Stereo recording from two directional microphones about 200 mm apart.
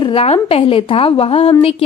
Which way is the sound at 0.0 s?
30° left (ahead or behind).